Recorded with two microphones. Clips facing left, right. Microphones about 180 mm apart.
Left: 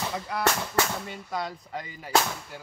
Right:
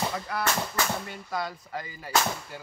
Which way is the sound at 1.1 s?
20° left (ahead or behind).